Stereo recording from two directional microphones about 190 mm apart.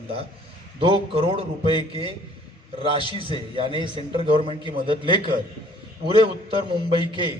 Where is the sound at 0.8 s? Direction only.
30° right (ahead or behind).